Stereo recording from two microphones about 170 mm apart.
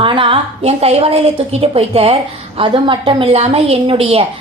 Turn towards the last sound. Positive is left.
turn(degrees=-35)  # may be behind; listen again after turning